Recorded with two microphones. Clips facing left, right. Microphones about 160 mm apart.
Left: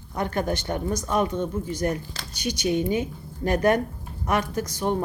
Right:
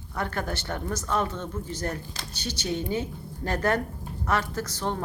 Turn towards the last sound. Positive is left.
turn(degrees=15)  # may be behind; listen again after turning